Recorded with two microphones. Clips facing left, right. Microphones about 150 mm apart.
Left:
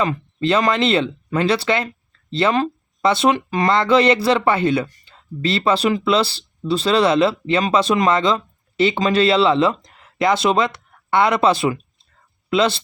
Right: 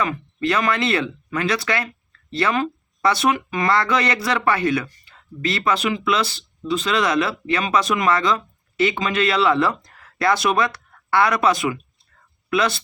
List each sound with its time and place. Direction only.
0.0 s speech: 25° left (ahead or behind)